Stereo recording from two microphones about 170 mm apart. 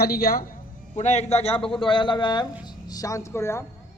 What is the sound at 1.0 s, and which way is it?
A man's voice, 40° left (ahead or behind).